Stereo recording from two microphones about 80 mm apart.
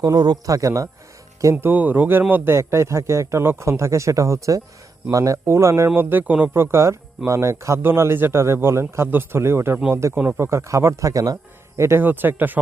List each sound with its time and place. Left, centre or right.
0.0 s a man's voice: right
0.5 s a man's voice: right
1.5 s a man's voice: right
11.8 s speech: right